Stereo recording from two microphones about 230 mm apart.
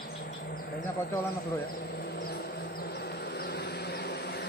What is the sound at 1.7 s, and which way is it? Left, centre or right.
Vehicle, left.